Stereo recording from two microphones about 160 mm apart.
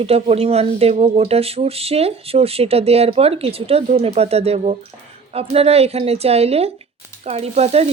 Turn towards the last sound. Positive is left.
turn(degrees=-40)  # may be behind; listen again after turning